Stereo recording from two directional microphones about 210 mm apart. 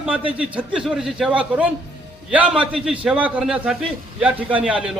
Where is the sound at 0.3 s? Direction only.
5° right (ahead or behind).